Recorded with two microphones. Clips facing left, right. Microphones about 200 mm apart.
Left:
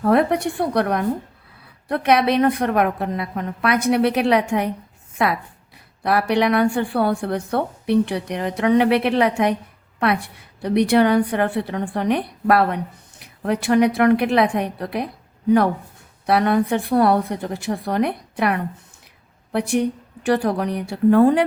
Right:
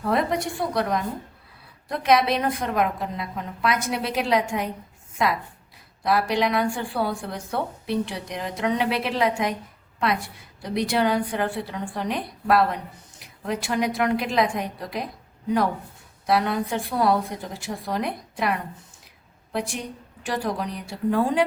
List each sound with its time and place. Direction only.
0.0 s a woman's voice: 60° left (ahead or behind)
10.6 s a woman's voice: 65° left (ahead or behind)
16.2 s a woman's voice: 60° left (ahead or behind)